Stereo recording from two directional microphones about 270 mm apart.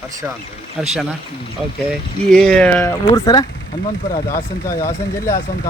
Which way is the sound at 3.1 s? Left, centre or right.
Centre.